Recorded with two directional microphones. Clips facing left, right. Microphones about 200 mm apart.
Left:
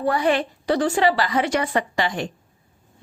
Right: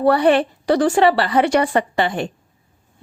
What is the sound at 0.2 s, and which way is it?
A woman's voice, 60° right (ahead or behind).